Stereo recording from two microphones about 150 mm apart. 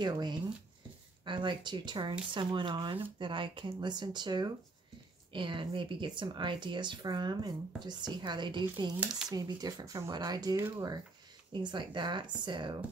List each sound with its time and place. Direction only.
0.0 s speech: 30° right (ahead or behind)